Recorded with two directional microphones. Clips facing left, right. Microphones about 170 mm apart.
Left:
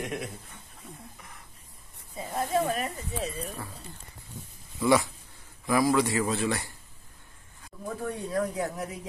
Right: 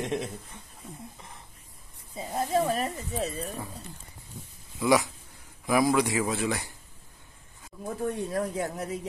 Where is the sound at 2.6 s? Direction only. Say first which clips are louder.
Right 2 dB; 35° right (ahead or behind).